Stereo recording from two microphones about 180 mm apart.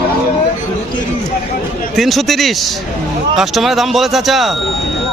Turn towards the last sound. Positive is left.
turn(degrees=0)  # may be behind; listen again after turning